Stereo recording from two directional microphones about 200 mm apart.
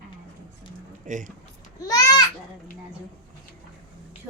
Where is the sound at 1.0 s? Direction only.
40° right (ahead or behind).